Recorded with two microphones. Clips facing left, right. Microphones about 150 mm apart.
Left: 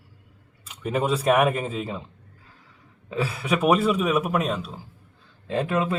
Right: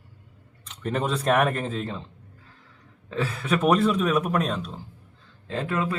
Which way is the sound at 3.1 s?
10° left (ahead or behind).